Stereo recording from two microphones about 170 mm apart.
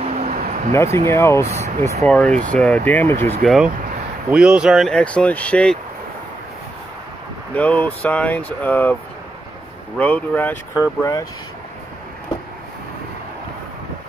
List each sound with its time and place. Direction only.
0.0 s a sound: 40° right (ahead or behind)
0.9 s speech: 15° left (ahead or behind)
3.4 s speech: centre (ahead or behind)
7.5 s speech: 10° left (ahead or behind)
9.9 s speech: 10° left (ahead or behind)